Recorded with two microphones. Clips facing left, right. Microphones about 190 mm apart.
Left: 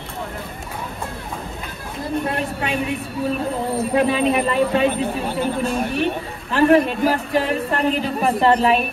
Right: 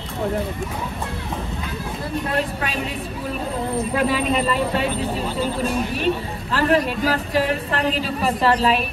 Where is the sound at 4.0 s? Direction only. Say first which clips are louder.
Left 3 dB; 20° left (ahead or behind).